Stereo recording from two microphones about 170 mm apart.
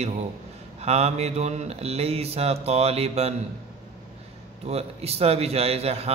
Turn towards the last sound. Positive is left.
turn(degrees=-35)  # may be behind; listen again after turning